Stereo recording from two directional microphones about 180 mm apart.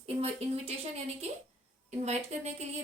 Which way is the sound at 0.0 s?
35° right (ahead or behind).